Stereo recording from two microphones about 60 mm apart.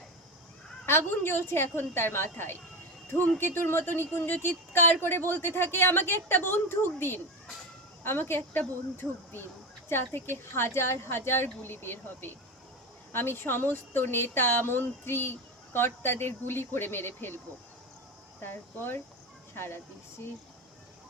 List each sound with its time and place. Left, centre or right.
0.9 s a woman's voice: left